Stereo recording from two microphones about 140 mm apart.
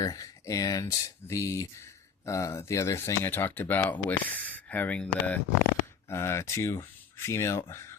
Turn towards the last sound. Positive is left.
turn(degrees=20)  # may be behind; listen again after turning